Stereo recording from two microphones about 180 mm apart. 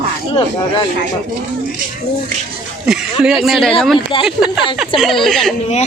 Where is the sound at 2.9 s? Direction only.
5° right (ahead or behind).